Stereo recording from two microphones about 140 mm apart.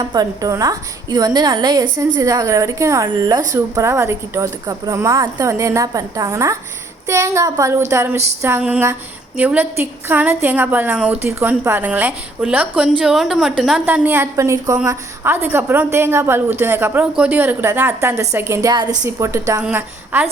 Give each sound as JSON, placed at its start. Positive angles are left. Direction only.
{"t": 0.0, "sound": "a woman's voice", "side_deg": -30}